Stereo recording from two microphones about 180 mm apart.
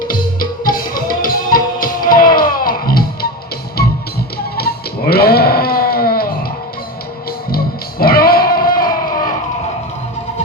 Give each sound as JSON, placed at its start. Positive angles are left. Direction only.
{"t": 0.1, "sound": "music", "side_deg": 50}
{"t": 4.5, "sound": "sheep", "side_deg": 60}
{"t": 7.5, "sound": "music", "side_deg": 55}